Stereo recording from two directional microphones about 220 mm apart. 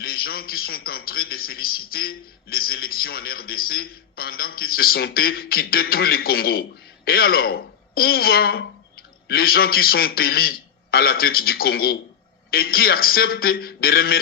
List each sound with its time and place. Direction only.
0.0 s a man's voice: 45° left (ahead or behind)